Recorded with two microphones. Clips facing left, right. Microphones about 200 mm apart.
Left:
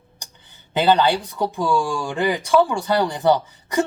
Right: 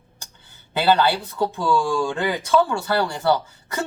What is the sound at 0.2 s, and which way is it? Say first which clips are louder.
Speech: left 1 dB; 20° left (ahead or behind).